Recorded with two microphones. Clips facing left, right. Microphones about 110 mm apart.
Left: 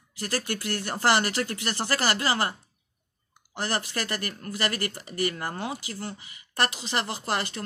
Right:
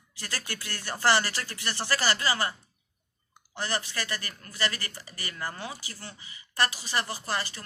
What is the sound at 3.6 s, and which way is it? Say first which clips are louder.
Speech: left 3 dB; 50° left (ahead or behind).